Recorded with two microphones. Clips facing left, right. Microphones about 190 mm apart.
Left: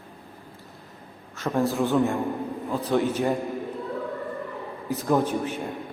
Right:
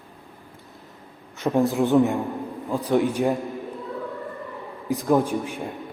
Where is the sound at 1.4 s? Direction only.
20° right (ahead or behind).